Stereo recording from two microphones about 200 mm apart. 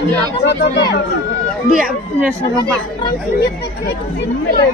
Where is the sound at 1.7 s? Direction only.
Centre (ahead or behind).